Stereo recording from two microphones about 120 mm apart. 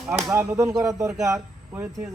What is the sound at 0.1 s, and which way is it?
Speech, 25° right (ahead or behind).